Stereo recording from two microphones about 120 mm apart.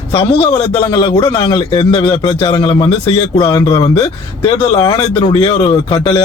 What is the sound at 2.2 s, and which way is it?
Speech, 25° left (ahead or behind).